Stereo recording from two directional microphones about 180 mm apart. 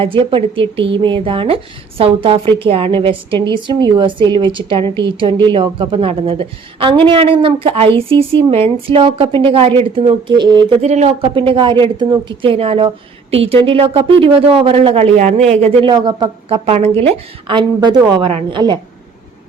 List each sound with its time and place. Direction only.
0.0 s a woman's voice: 30° right (ahead or behind)
10.8 s a woman's voice: 40° right (ahead or behind)